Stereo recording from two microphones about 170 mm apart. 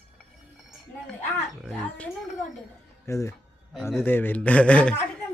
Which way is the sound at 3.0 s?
15° left (ahead or behind).